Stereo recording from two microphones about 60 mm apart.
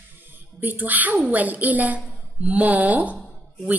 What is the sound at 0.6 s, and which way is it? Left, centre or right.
A woman's voice, right.